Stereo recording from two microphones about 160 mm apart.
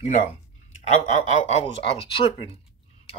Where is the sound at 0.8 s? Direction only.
45° left (ahead or behind).